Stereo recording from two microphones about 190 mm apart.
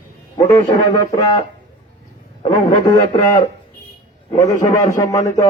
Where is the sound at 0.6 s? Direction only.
20° left (ahead or behind).